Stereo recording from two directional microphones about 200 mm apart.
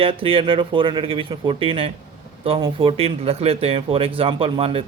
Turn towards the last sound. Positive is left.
turn(degrees=-30)  # may be behind; listen again after turning